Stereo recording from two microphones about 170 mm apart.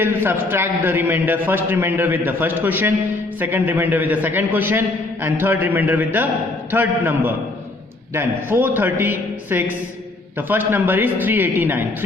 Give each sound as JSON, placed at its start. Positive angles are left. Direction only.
{"t": 0.0, "sound": "a man's voice", "side_deg": -10}